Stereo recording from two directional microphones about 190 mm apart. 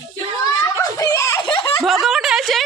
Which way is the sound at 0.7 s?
20° left (ahead or behind).